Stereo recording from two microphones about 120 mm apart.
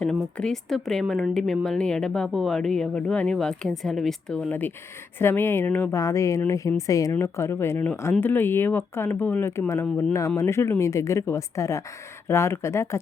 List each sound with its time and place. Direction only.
0.0 s speech: 5° left (ahead or behind); by 13.0 s 25° left (ahead or behind)